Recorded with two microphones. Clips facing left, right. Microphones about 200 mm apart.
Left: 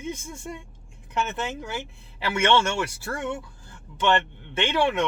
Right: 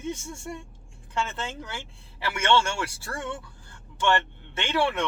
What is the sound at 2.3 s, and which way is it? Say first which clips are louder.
Speech: left 2 dB; 20° left (ahead or behind).